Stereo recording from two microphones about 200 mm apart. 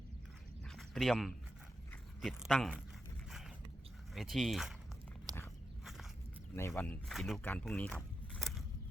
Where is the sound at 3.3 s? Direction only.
Centre (ahead or behind).